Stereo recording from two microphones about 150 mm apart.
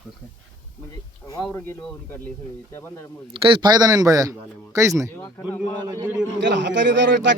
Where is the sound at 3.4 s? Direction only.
30° right (ahead or behind); by 6.3 s 10° right (ahead or behind).